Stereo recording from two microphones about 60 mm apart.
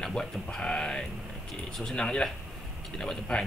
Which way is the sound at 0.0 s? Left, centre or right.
Centre.